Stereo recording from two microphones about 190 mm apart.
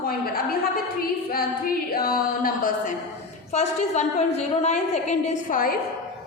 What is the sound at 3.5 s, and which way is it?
A woman's voice, 35° left (ahead or behind).